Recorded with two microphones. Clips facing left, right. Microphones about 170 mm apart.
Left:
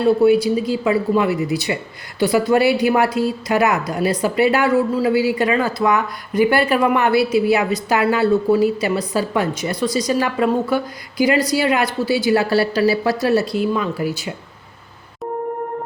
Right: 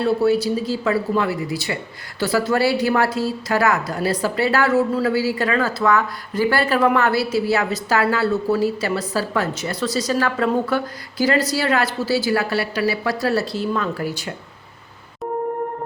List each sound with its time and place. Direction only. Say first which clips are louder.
0.0 s speech: left 4 dB; 15° left (ahead or behind)
13.6 s speech: left 3 dB; 10° left (ahead or behind)